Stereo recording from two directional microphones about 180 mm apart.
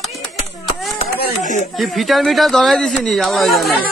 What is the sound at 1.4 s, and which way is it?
Speech, 40° left (ahead or behind).